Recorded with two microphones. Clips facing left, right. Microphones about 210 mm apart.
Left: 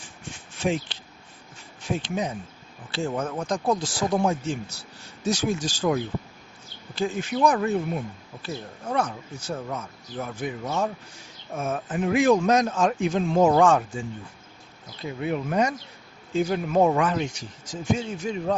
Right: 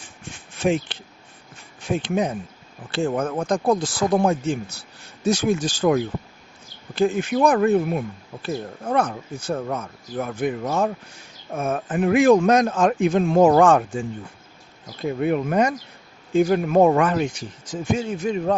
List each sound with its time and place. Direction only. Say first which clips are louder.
0.6 s speech: right 5 dB; 55° right (ahead or behind)
15.0 s speech: right 6 dB; 55° right (ahead or behind)